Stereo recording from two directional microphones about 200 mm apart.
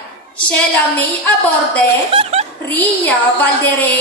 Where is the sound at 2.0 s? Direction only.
30° right (ahead or behind).